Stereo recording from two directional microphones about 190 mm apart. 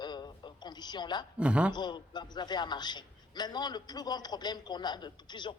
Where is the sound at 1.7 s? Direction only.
25° left (ahead or behind).